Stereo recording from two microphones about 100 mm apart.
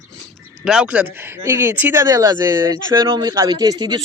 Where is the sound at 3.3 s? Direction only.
40° right (ahead or behind).